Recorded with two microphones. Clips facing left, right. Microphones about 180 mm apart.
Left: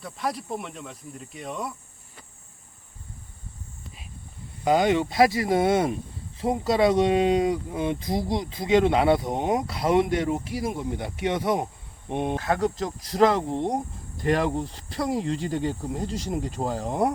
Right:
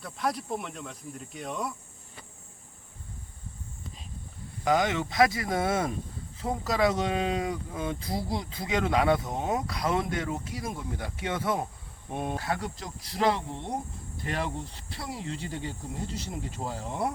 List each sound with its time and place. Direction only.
0.0 s speech: centre (ahead or behind)
4.6 s speech: 25° left (ahead or behind)
12.5 s speech: 45° left (ahead or behind)